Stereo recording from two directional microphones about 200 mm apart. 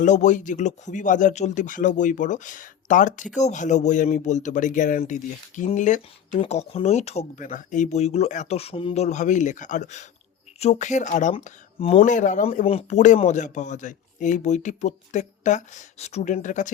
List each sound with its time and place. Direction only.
0.0 s speech: 40° left (ahead or behind)
12.5 s speech: 30° left (ahead or behind)